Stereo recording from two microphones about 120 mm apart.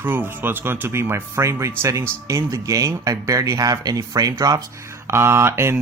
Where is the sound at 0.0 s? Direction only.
15° right (ahead or behind).